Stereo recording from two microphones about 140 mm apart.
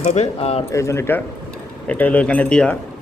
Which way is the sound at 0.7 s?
20° left (ahead or behind).